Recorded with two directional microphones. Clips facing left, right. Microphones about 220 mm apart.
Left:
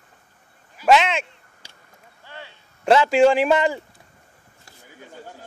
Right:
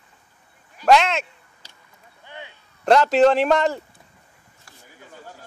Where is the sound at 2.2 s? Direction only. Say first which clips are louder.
Right 1 dB; 20° right (ahead or behind).